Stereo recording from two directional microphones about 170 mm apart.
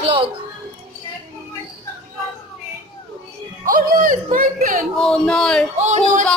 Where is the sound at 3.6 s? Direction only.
55° right (ahead or behind).